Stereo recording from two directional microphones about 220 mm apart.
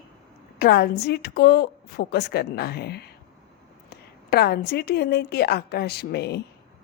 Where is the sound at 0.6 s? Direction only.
45° left (ahead or behind).